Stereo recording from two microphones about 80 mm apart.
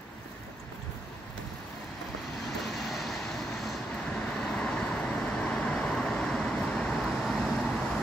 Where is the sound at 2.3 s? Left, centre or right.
Centre.